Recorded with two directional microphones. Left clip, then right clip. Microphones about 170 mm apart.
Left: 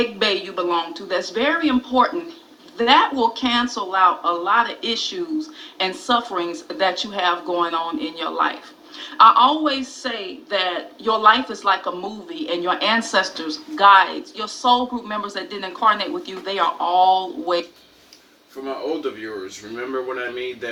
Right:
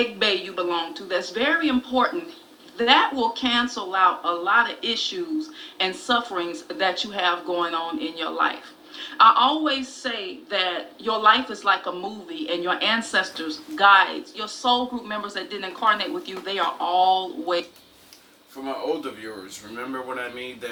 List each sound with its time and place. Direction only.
0.0 s speech: 50° left (ahead or behind)